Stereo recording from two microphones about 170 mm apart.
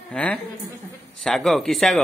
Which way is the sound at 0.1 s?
5° left (ahead or behind).